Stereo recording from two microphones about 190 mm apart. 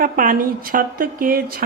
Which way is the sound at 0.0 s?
45° right (ahead or behind).